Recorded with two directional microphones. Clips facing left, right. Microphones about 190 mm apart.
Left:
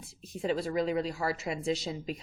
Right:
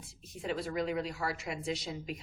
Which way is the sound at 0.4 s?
30° left (ahead or behind).